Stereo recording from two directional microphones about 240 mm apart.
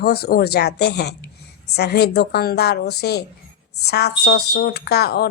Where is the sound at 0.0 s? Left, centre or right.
Left.